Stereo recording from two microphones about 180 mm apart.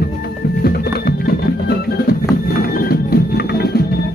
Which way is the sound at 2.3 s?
55° left (ahead or behind).